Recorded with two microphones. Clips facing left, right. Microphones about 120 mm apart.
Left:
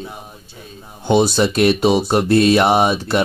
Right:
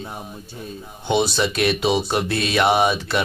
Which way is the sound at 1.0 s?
40° left (ahead or behind).